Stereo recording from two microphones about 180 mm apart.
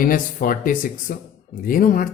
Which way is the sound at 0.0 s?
50° left (ahead or behind).